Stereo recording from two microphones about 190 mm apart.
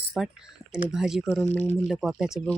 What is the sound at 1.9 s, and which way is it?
Speech, centre (ahead or behind).